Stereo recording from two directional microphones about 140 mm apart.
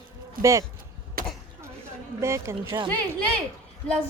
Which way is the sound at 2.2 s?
20° right (ahead or behind).